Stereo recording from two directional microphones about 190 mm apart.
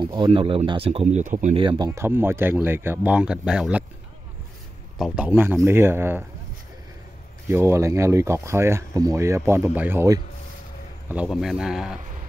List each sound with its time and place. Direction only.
0.0 s speech: 25° right (ahead or behind)
1.6 s speech: 25° right (ahead or behind)
1.9 s speech: 15° right (ahead or behind)
4.9 s speech: 5° right (ahead or behind)
7.4 s speech: 15° right (ahead or behind)
11.1 s speech: 5° right (ahead or behind)